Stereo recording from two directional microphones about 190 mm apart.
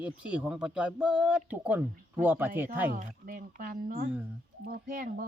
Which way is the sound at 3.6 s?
50° right (ahead or behind).